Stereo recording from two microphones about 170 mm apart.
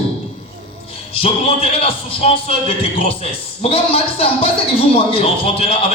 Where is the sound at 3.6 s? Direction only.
35° left (ahead or behind).